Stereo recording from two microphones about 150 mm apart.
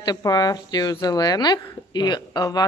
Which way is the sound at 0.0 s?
25° left (ahead or behind).